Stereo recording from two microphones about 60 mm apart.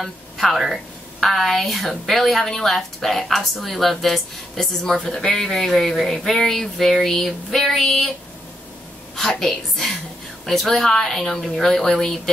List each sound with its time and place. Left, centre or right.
0.0 s a woman's voice: centre
9.1 s a woman's voice: centre